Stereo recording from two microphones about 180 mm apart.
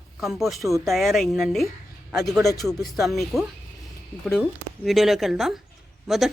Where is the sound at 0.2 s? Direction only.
Centre (ahead or behind).